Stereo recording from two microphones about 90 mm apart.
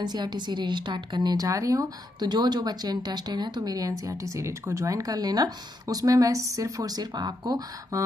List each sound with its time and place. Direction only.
0.0 s speech: 55° right (ahead or behind)
2.2 s speech: 55° right (ahead or behind)